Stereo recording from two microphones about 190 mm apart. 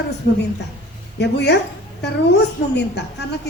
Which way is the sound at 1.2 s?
60° left (ahead or behind).